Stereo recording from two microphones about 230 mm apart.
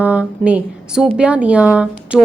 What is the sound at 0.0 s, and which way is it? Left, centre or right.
A woman's voice, centre.